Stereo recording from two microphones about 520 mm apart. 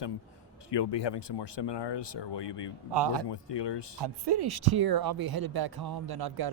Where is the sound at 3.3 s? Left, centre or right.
Left.